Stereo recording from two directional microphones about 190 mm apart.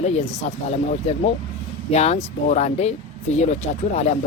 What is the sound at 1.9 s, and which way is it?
Speech, 35° left (ahead or behind).